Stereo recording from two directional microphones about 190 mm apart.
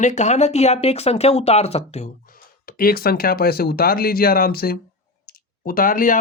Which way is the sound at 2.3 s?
50° left (ahead or behind).